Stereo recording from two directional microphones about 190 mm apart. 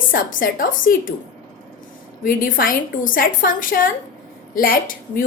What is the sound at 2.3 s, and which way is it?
A woman's voice, 45° left (ahead or behind).